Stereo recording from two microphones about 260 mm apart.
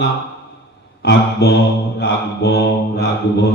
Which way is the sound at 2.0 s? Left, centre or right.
Left.